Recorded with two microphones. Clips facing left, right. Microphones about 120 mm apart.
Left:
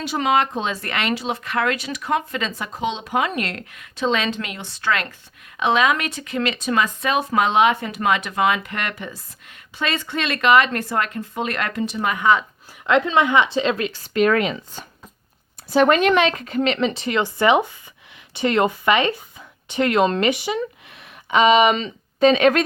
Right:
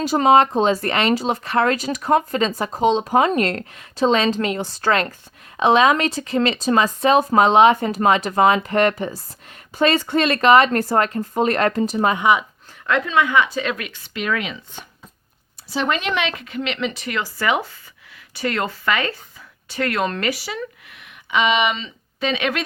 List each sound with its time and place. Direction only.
0.0 s speech: 40° right (ahead or behind)
12.2 s speech: 15° right (ahead or behind)
12.8 s speech: 25° left (ahead or behind); by 14.6 s 45° left (ahead or behind)
15.7 s speech: 50° left (ahead or behind)